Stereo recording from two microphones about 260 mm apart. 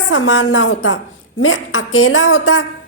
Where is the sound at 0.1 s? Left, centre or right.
Left.